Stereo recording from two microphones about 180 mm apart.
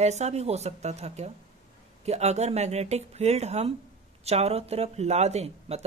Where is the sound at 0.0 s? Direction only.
40° right (ahead or behind).